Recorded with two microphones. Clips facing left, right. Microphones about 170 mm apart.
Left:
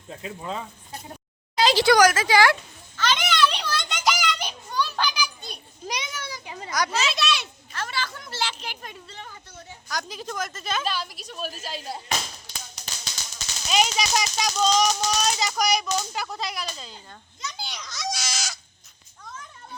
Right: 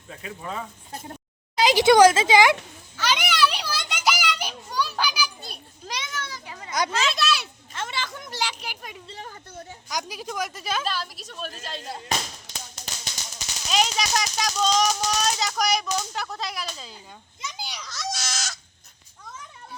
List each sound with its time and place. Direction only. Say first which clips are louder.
1.6 s speech: right 3 dB; 20° right (ahead or behind)
2.9 s children playing: left 1 dB; 10° right (ahead or behind)
5.9 s children playing: even; 15° left (ahead or behind)
6.7 s a child's voice: even; 25° right (ahead or behind)
6.9 s speech: right 1 dB; centre (ahead or behind)
7.7 s speech: even; 20° right (ahead or behind)
9.0 s speech: right 3 dB; 35° right (ahead or behind)
9.9 s speech: right 1 dB; 10° right (ahead or behind); by 12.0 s 5° left (ahead or behind)
13.7 s speech: left 1 dB; 5° left (ahead or behind)
17.6 s a sound: even; 10° right (ahead or behind)